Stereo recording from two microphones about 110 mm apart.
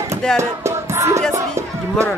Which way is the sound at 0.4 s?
25° right (ahead or behind).